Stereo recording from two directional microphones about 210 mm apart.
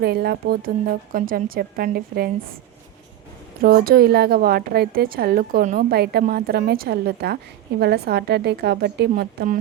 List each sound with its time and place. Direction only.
0.0 s a woman's voice: 50° right (ahead or behind)
3.6 s a woman's voice: 45° right (ahead or behind)